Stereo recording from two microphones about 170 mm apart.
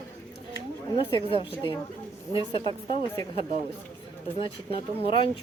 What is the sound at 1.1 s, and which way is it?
Speech, 30° left (ahead or behind).